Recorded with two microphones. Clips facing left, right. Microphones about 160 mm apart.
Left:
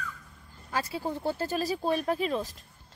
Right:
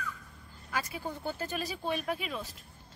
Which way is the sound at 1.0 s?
30° left (ahead or behind).